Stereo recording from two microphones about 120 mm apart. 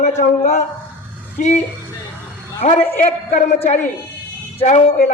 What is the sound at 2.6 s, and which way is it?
A man's voice, 90° left.